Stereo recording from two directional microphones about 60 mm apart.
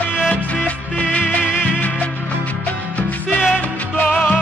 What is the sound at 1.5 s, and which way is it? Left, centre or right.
Music, left.